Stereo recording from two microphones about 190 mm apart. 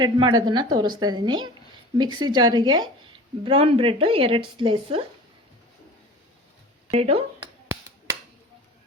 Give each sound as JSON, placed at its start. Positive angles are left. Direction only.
{"t": 0.0, "sound": "speech", "side_deg": -20}
{"t": 6.9, "sound": "speech", "side_deg": -30}